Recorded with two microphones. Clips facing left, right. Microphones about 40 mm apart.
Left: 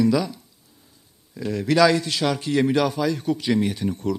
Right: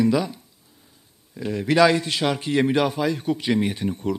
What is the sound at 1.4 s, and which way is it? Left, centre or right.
A man's voice, right.